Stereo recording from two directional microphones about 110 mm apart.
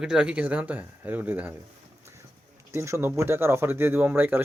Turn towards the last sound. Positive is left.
turn(degrees=-15)  # may be behind; listen again after turning